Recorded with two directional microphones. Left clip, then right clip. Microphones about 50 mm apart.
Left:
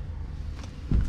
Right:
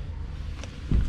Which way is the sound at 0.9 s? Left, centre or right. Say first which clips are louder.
Even; left.